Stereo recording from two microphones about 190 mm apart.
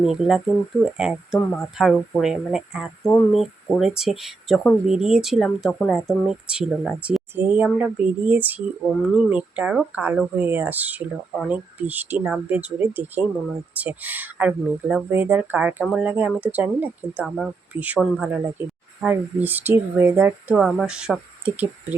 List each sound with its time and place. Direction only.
0.0 s speech: centre (ahead or behind)